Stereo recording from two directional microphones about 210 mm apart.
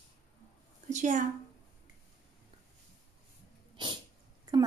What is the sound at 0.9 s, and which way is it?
Speech, 35° right (ahead or behind).